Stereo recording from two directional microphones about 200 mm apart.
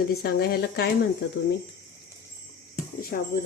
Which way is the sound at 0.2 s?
50° left (ahead or behind).